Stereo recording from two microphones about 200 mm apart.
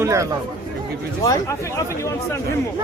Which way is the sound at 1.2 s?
15° left (ahead or behind).